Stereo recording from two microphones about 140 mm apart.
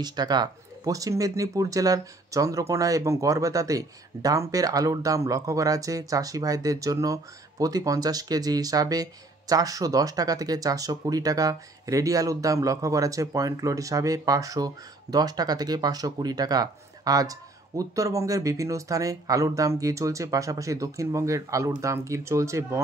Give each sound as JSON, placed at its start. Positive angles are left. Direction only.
{"t": 0.0, "sound": "speech", "side_deg": -30}